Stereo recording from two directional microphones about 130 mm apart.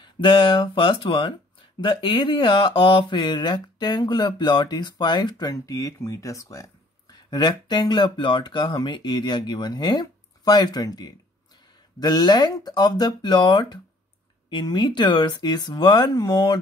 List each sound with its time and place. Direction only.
0.0 s speech: 40° left (ahead or behind)